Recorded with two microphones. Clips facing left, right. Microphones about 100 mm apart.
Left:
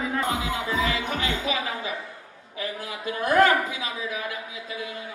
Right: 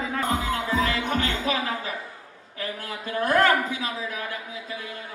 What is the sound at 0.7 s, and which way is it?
Music, 45° right (ahead or behind).